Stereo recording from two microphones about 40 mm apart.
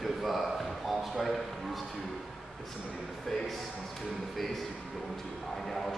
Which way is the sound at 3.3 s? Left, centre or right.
Centre.